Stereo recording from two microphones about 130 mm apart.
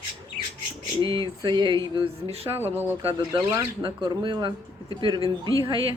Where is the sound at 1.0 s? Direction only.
40° right (ahead or behind).